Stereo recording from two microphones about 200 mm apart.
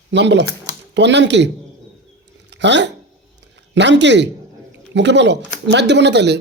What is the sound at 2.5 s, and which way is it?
Speech, 60° right (ahead or behind).